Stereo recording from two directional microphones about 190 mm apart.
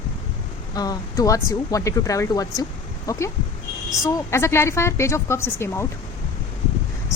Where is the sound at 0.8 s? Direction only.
20° left (ahead or behind).